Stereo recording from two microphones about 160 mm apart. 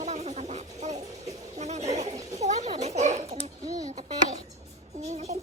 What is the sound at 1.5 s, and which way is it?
Bird, 45° right (ahead or behind).